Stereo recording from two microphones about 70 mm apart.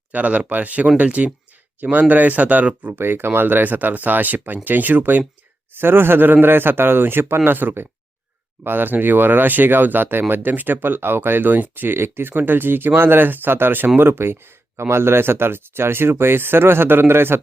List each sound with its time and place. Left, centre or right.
0.1 s speech: right